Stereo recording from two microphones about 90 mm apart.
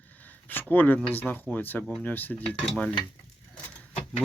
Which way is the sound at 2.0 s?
20° left (ahead or behind).